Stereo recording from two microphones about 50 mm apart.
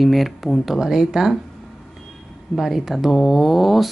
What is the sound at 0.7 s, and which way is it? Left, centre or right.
Speech, centre.